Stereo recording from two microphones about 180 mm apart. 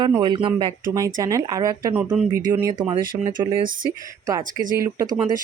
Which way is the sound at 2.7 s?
30° right (ahead or behind).